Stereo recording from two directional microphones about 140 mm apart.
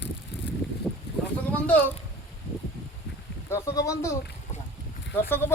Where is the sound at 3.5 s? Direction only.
20° left (ahead or behind).